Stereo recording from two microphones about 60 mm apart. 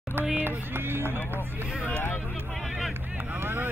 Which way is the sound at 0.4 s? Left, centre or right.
Right.